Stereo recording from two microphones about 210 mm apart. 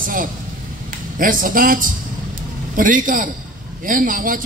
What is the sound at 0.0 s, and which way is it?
A man's voice, 40° right (ahead or behind).